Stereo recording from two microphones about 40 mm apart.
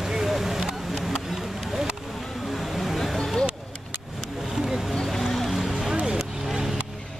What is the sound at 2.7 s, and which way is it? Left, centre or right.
Vehicle, centre.